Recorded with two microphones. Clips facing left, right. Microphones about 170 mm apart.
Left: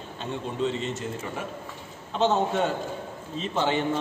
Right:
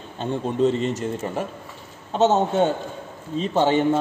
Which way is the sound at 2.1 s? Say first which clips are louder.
Right 5 dB; 40° right (ahead or behind).